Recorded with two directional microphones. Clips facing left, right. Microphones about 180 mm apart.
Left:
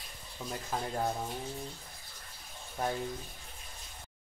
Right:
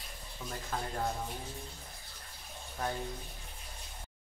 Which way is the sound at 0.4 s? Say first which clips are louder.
Left 3 dB; 15° left (ahead or behind).